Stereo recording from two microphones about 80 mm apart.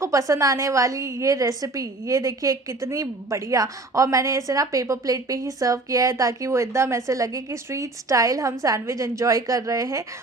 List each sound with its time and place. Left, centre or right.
0.0 s a woman's voice: right